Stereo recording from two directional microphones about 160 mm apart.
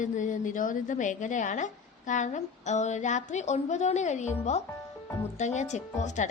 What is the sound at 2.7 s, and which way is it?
Speech, 45° left (ahead or behind).